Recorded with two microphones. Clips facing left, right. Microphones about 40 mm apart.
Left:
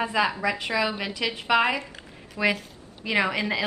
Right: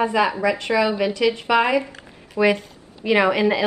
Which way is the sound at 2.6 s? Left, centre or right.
Centre.